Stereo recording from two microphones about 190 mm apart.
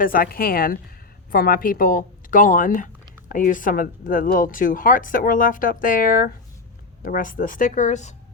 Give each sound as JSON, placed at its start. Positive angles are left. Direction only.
{"t": 0.0, "sound": "speech", "side_deg": 50}